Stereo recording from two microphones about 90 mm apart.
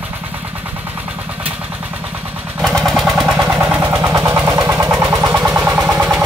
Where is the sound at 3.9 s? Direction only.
40° right (ahead or behind); by 6.2 s 20° right (ahead or behind).